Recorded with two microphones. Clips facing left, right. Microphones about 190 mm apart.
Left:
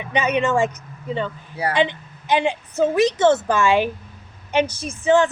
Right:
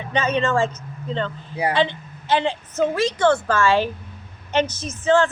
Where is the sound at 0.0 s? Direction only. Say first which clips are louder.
Left 1 dB; 15° left (ahead or behind).